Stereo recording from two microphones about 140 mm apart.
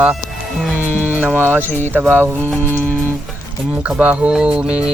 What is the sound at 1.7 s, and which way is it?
Speech, 15° left (ahead or behind).